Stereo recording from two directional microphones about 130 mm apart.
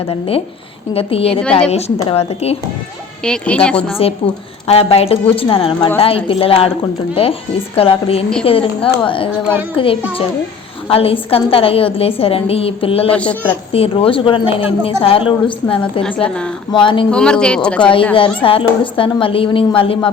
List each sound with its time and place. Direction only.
0.1 s a woman's voice: 50° left (ahead or behind)
3.2 s speech: 10° left (ahead or behind)
4.6 s a woman's voice: 50° left (ahead or behind)
7.8 s a woman's voice: 50° left (ahead or behind)
13.1 s speech: 10° left (ahead or behind)
13.7 s a woman's voice: 50° left (ahead or behind)
16.0 s speech: 10° left (ahead or behind)
16.7 s music: 40° left (ahead or behind)
17.1 s speech: 5° left (ahead or behind)
17.7 s music: 40° left (ahead or behind)
18.4 s a woman's voice: 45° left (ahead or behind)